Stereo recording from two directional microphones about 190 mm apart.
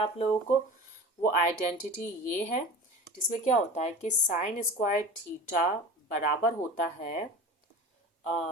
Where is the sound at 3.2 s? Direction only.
40° left (ahead or behind).